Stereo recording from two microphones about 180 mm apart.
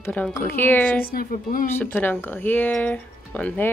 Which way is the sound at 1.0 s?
55° left (ahead or behind).